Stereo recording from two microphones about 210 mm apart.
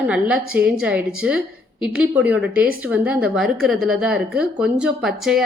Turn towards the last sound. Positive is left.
turn(degrees=0)  # may be behind; listen again after turning